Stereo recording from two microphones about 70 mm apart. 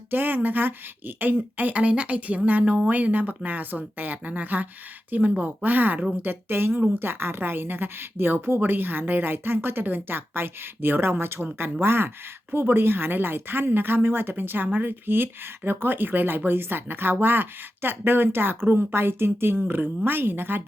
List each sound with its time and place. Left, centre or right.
0.1 s speech: right